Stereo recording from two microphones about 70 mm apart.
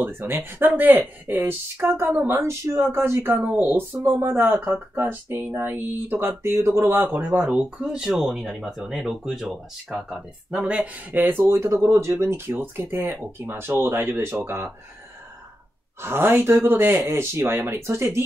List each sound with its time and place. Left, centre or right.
0.0 s speech: right
7.4 s speech: centre
11.1 s speech: right
11.5 s speech: right
16.0 s speech: right